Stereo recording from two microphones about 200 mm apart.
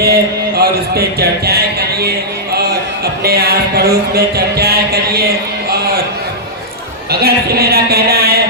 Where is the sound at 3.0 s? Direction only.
50° right (ahead or behind).